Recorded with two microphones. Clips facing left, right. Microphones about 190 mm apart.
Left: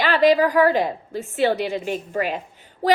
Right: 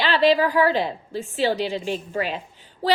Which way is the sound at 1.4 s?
60° left (ahead or behind).